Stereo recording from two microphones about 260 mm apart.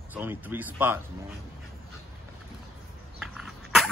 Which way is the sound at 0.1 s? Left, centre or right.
Centre.